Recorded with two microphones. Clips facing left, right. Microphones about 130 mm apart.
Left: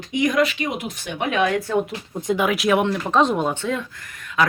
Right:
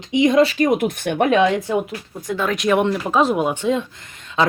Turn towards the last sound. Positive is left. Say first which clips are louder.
# right 1 dB
turn(degrees=-25)  # may be behind; listen again after turning